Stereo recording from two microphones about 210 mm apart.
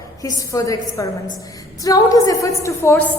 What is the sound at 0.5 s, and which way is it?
A woman's voice, 15° left (ahead or behind).